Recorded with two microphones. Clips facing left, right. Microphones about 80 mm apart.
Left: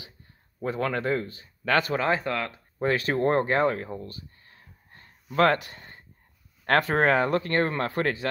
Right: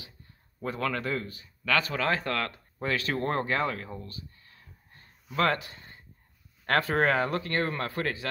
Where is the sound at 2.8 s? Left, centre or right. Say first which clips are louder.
Left 5 dB; left.